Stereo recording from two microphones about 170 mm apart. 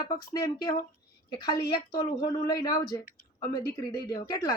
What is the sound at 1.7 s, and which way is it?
Speech, 25° left (ahead or behind).